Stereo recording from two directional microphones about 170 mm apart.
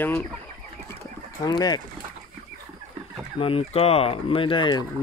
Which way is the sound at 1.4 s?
25° left (ahead or behind).